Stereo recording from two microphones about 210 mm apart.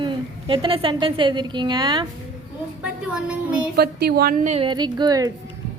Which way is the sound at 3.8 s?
50° right (ahead or behind).